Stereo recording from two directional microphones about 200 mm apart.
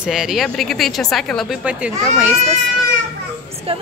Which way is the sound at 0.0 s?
Centre (ahead or behind).